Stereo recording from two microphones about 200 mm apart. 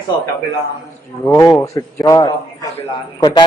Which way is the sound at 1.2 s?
15° left (ahead or behind).